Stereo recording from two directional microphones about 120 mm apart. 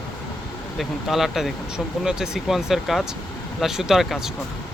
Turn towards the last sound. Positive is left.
turn(degrees=-5)  # may be behind; listen again after turning